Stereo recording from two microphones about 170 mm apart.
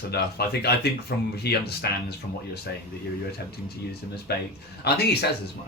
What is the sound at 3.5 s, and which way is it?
Speech, 70° left (ahead or behind).